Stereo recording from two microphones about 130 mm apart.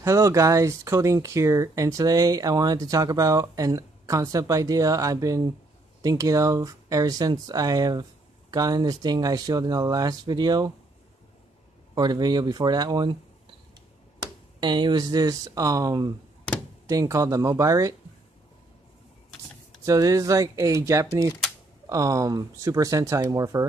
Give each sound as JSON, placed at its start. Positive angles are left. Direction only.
{"t": 0.0, "sound": "speech", "side_deg": -25}
{"t": 11.9, "sound": "speech", "side_deg": -30}
{"t": 14.2, "sound": "speech", "side_deg": -35}
{"t": 19.8, "sound": "speech", "side_deg": -25}